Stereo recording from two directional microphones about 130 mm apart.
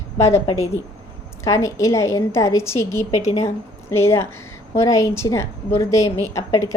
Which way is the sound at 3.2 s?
55° left (ahead or behind).